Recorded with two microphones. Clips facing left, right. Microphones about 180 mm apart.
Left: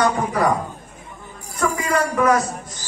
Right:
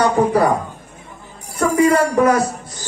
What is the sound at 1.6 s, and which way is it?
Speech, 30° right (ahead or behind).